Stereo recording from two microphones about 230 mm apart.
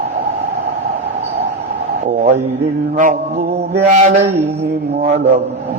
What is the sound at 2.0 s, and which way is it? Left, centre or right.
A man's voice, right.